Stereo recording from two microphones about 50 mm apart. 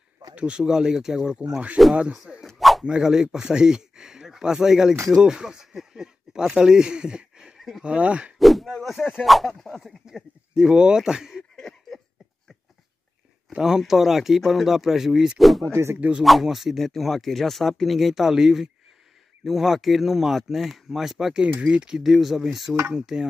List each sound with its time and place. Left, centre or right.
0.3 s speech: right
1.3 s speech: right
2.4 s dog: centre
2.8 s speech: centre
7.5 s a sound: centre
7.8 s speech: right
8.4 s speech: centre
10.5 s speech: centre
13.6 s speech: centre
15.7 s speech: right
16.3 s speech: centre
21.4 s speech: right
21.9 s speech: centre